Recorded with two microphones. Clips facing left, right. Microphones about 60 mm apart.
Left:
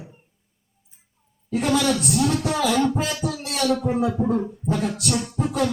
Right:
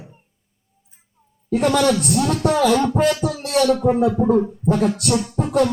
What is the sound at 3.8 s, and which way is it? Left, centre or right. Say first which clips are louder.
Speech: right 6 dB; right.